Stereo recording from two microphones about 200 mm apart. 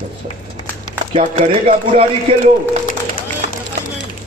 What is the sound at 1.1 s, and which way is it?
Speech, 35° right (ahead or behind).